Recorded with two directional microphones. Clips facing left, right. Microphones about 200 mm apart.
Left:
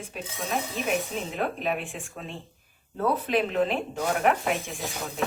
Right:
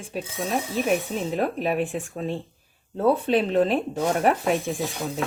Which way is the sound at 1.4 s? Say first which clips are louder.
Right 5 dB; 40° right (ahead or behind).